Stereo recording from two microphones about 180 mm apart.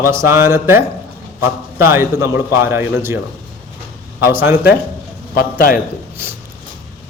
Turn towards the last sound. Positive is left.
turn(degrees=55)  # may be behind; listen again after turning